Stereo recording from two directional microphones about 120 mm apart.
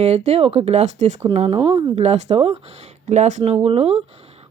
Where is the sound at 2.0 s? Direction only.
65° right (ahead or behind).